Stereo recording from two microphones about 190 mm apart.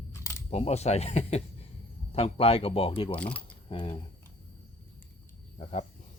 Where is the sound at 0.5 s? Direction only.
35° left (ahead or behind).